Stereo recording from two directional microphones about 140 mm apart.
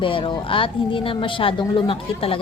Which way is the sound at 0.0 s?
40° left (ahead or behind).